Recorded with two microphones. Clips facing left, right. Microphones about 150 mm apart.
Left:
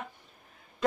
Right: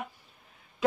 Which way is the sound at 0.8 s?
5° right (ahead or behind).